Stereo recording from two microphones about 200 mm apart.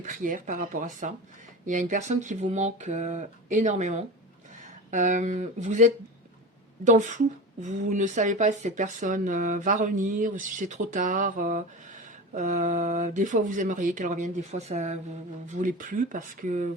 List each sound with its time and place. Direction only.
0.0 s speech: 40° right (ahead or behind)